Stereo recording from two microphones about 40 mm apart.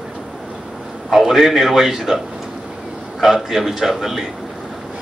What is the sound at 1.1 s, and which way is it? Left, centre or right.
A man's voice, centre.